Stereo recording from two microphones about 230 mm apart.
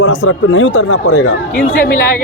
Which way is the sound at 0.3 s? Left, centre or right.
Left.